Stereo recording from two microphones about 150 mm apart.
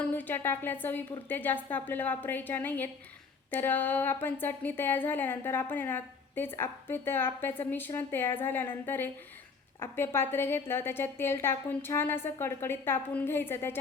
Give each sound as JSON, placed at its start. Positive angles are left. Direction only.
{"t": 0.0, "sound": "speech", "side_deg": 10}